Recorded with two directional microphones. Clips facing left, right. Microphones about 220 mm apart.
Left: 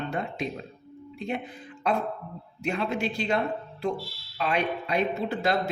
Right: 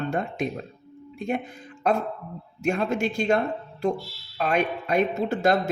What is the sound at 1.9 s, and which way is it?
Speech, 45° right (ahead or behind).